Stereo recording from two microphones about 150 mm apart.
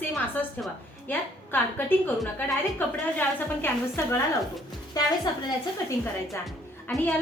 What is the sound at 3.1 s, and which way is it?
A woman's voice, 15° left (ahead or behind).